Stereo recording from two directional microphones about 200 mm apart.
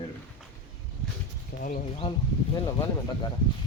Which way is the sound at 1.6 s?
45° left (ahead or behind).